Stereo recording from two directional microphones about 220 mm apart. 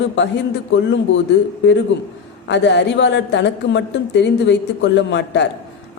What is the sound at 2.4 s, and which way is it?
A woman's voice, 55° left (ahead or behind).